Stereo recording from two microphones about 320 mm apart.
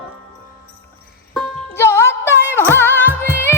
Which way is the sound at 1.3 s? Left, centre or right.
Centre.